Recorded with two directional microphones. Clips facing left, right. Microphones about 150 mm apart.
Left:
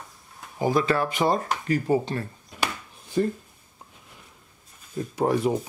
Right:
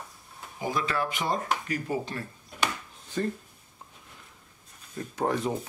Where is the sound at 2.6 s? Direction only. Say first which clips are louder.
Left 1 dB; 10° left (ahead or behind).